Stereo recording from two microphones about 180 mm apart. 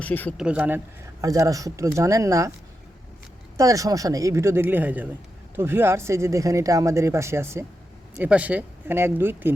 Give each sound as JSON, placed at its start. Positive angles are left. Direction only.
{"t": 0.0, "sound": "speech", "side_deg": 10}
{"t": 0.3, "sound": "speech", "side_deg": -5}
{"t": 1.2, "sound": "speech", "side_deg": -20}
{"t": 3.6, "sound": "speech", "side_deg": -20}